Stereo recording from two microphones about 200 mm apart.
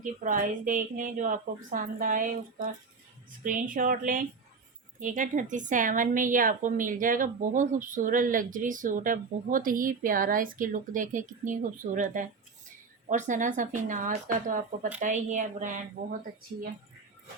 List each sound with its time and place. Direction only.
0.0 s a woman's voice: 40° right (ahead or behind)